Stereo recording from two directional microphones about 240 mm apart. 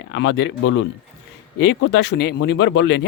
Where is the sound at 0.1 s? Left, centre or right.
Left.